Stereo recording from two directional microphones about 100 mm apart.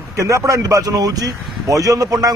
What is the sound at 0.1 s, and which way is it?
A man's voice, 35° right (ahead or behind).